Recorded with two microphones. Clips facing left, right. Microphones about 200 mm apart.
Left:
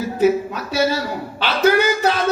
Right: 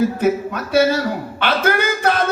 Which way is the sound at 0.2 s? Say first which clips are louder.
Left 2 dB; 55° right (ahead or behind).